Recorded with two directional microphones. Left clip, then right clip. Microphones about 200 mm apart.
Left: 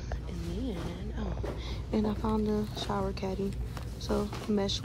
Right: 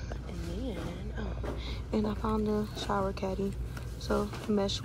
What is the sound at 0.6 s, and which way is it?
Speech, 15° left (ahead or behind).